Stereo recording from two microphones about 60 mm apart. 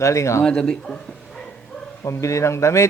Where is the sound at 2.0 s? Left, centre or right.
Left.